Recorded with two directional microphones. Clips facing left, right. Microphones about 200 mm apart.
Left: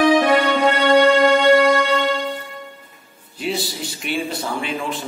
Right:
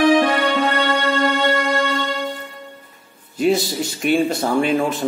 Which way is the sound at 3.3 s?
45° right (ahead or behind).